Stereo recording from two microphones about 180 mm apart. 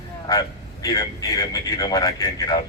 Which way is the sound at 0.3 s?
20° left (ahead or behind).